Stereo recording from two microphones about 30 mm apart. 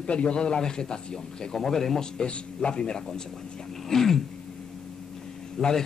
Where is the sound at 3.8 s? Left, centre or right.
Centre.